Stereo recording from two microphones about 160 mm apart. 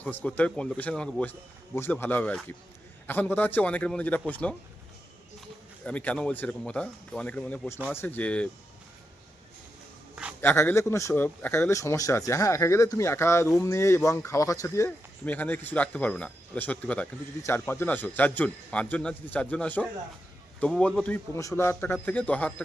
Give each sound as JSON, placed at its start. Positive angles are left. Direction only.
{"t": 0.0, "sound": "speech", "side_deg": 10}
{"t": 5.8, "sound": "speech", "side_deg": 10}
{"t": 10.4, "sound": "speech", "side_deg": 15}